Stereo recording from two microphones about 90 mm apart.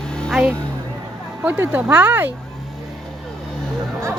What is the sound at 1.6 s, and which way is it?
Speech, 20° right (ahead or behind).